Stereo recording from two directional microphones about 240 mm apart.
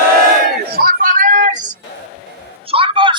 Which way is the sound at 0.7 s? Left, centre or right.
Right.